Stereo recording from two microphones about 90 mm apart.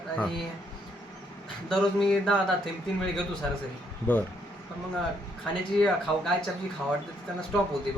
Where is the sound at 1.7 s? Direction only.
5° left (ahead or behind).